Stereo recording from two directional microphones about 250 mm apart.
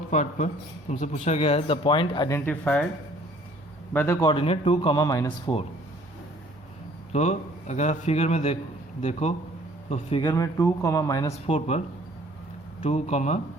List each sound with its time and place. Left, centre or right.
0.1 s speech: left; by 2.8 s centre
3.9 s speech: centre
7.1 s speech: left
11.4 s speech: left
12.8 s speech: left